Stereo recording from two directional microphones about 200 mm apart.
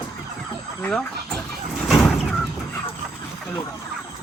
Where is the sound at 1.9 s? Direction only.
Centre (ahead or behind).